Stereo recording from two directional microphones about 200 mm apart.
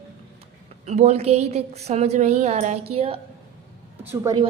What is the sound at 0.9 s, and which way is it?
A woman's voice, 35° right (ahead or behind).